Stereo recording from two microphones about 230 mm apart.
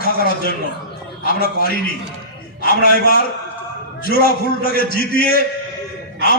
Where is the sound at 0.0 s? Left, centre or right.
Left.